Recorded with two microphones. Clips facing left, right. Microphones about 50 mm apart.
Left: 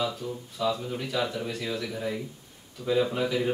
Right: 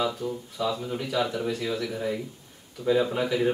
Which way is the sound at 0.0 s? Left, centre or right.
Centre.